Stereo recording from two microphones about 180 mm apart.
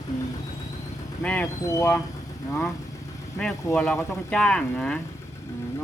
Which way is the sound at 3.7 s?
5° left (ahead or behind).